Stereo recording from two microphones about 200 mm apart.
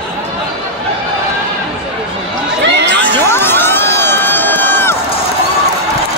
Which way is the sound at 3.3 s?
10° left (ahead or behind).